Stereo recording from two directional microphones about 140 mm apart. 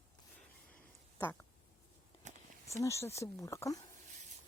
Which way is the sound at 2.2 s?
60° right (ahead or behind).